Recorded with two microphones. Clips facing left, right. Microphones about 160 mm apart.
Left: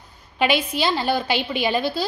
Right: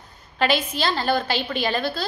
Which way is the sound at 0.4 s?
10° left (ahead or behind).